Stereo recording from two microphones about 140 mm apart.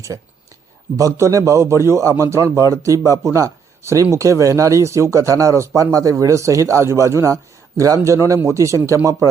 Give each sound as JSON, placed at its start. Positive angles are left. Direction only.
{"t": 0.9, "sound": "speech", "side_deg": -20}